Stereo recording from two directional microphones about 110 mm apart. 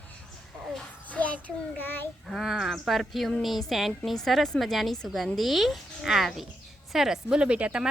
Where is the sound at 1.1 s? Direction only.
15° left (ahead or behind).